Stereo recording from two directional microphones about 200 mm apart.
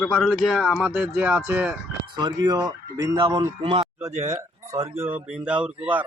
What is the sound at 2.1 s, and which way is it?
Speech, 20° right (ahead or behind).